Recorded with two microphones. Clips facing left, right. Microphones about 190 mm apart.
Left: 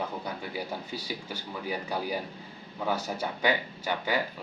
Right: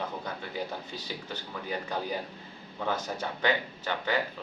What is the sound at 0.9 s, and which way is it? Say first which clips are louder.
Speech: left 2 dB; 10° left (ahead or behind).